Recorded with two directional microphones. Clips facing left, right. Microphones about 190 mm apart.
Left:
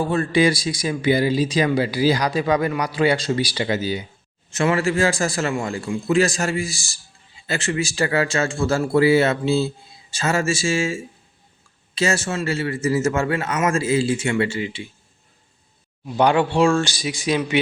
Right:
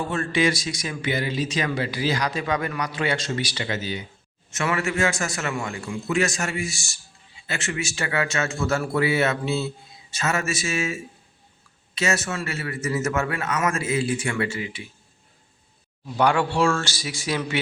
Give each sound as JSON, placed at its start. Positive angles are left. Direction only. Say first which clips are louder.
{"t": 0.0, "sound": "a man's voice", "louder": "left 5 dB", "side_deg": 35}
{"t": 16.0, "sound": "speech", "louder": "left 3 dB", "side_deg": 20}